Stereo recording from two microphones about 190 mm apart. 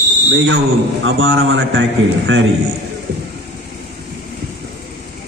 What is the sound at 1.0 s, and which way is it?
A man's voice, 90° right.